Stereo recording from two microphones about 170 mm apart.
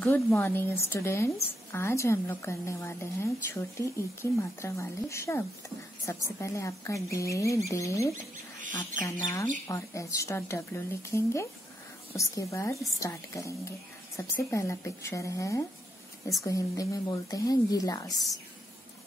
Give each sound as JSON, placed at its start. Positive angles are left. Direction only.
{"t": 0.0, "sound": "speech", "side_deg": 15}
{"t": 9.7, "sound": "a woman's voice", "side_deg": 20}